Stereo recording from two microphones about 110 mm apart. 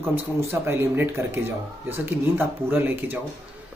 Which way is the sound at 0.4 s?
25° right (ahead or behind).